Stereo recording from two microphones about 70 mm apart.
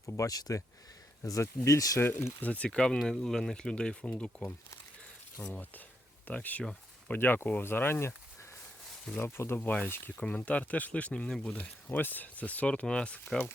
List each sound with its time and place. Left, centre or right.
0.0 s speech: left
0.3 s speech: left
1.2 s speech: left
2.0 s speech: left
2.4 s speech: centre
5.5 s speech: left
11.5 s speech: left